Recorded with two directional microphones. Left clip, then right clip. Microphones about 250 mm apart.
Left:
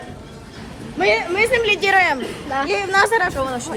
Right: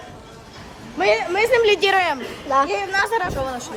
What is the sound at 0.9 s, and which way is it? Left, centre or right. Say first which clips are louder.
A woman's voice: left 1 dB; right.